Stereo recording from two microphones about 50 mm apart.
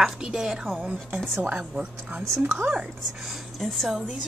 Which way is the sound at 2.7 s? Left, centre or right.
Centre.